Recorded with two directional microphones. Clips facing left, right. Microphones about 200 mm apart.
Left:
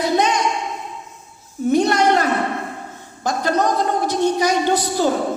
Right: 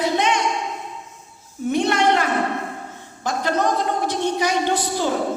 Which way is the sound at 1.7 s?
40° left (ahead or behind).